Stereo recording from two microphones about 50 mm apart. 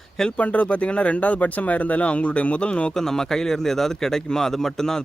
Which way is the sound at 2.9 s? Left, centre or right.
Centre.